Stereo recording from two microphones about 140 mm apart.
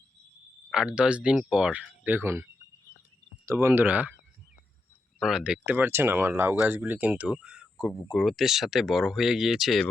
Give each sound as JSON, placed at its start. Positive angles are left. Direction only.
{"t": 0.7, "sound": "speech", "side_deg": -5}
{"t": 5.2, "sound": "speech", "side_deg": -5}